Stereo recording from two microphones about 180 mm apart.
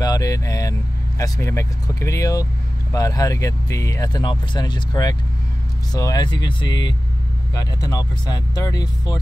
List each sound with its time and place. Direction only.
0.0 s speech: 20° left (ahead or behind)